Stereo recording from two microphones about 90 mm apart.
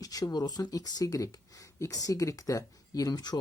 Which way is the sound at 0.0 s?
45° left (ahead or behind).